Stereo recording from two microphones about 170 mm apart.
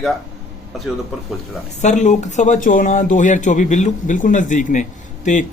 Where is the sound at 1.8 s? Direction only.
45° left (ahead or behind).